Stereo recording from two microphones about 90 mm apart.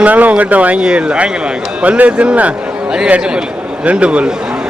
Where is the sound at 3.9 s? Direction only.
15° right (ahead or behind).